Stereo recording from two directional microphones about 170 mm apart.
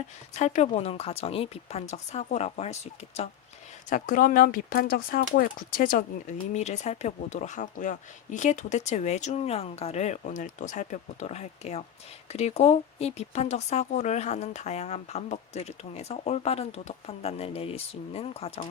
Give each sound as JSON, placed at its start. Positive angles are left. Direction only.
{"t": 0.3, "sound": "speech", "side_deg": 40}
{"t": 3.8, "sound": "speech", "side_deg": 50}